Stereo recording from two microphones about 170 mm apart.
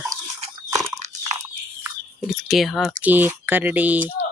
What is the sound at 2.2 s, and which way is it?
Speech, centre (ahead or behind).